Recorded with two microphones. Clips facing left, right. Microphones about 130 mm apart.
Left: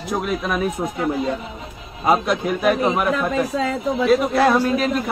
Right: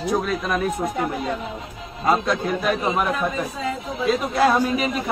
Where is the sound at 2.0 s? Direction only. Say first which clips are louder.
Left 2 dB; 15° left (ahead or behind).